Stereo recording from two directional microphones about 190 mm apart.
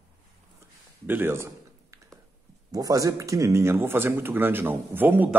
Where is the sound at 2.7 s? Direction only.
20° right (ahead or behind).